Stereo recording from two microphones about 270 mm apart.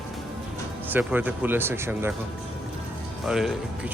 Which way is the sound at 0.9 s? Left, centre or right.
Centre.